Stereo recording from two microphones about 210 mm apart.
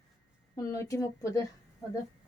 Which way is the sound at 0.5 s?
15° left (ahead or behind).